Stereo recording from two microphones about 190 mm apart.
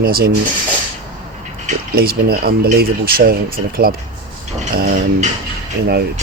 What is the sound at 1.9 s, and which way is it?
Speech, 55° right (ahead or behind).